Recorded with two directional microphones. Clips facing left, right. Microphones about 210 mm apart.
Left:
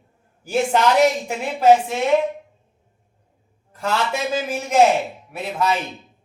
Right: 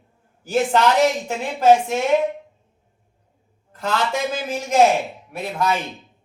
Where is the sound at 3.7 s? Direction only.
10° left (ahead or behind).